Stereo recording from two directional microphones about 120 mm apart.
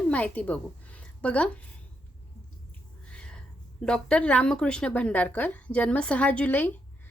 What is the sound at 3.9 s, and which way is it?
A woman's voice, 10° left (ahead or behind).